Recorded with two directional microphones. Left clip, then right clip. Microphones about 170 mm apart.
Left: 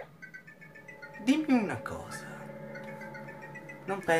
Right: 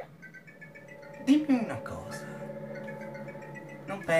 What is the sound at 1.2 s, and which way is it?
Speech, 55° left (ahead or behind).